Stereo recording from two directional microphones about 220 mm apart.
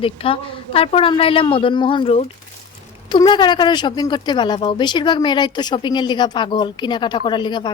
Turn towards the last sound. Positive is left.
turn(degrees=20)  # may be behind; listen again after turning